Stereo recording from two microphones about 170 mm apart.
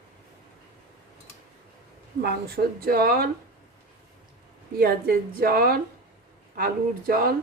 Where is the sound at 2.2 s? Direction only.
65° right (ahead or behind).